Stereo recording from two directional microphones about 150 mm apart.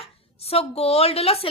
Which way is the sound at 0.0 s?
40° left (ahead or behind).